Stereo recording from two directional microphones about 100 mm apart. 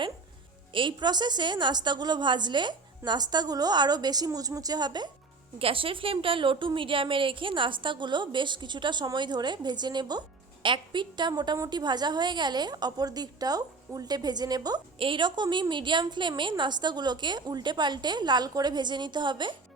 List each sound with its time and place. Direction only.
0.7 s a woman's voice: 55° right (ahead or behind)
5.5 s a woman's voice: 65° right (ahead or behind); by 14.8 s 40° right (ahead or behind)
14.9 s a woman's voice: 60° right (ahead or behind)